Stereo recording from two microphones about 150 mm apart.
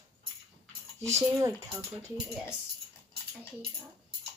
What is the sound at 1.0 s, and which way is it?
Speech, 20° right (ahead or behind).